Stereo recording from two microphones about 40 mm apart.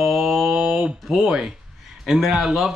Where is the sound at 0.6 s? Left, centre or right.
Centre.